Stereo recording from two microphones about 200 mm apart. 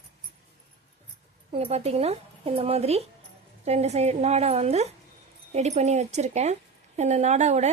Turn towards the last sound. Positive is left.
turn(degrees=-35)  # may be behind; listen again after turning